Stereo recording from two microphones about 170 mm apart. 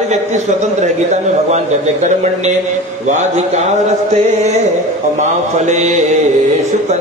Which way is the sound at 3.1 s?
45° right (ahead or behind).